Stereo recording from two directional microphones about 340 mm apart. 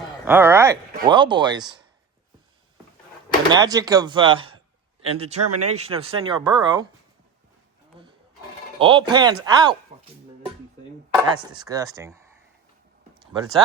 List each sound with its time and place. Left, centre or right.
0.3 s speech: centre
3.5 s speech: centre
5.4 s speech: right
5.7 s speech: centre
8.0 s roaring cats: centre
8.8 s speech: centre
11.1 s speech: centre